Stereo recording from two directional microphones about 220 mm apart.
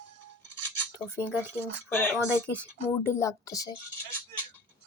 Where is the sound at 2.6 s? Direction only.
10° left (ahead or behind).